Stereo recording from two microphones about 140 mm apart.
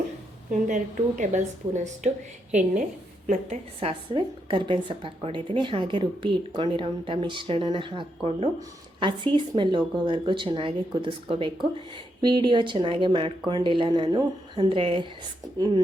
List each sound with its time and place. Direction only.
0.7 s a woman's voice: 65° right (ahead or behind)
3.8 s a woman's voice: 40° right (ahead or behind)